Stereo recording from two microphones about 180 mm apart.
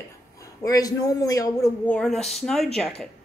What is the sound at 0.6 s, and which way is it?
A woman's voice, 20° left (ahead or behind).